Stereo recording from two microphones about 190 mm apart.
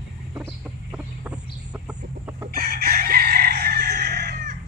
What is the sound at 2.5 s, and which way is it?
Chicken, 50° right (ahead or behind).